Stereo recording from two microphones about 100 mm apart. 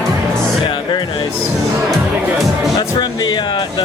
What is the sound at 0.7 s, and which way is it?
Music, 55° left (ahead or behind).